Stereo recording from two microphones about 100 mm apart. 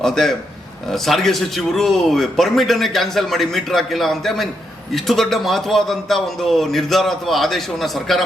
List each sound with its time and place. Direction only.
0.0 s a man's voice: 5° left (ahead or behind)